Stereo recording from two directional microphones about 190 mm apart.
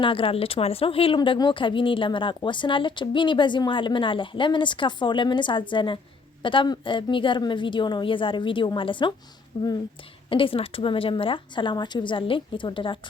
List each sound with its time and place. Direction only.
0.0 s speech: 30° left (ahead or behind)